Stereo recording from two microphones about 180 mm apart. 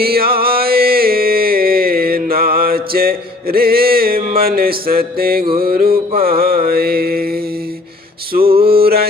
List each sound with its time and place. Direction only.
0.0 s music: 60° right (ahead or behind)
5.5 s mantra: 55° right (ahead or behind)
8.6 s music: 60° right (ahead or behind)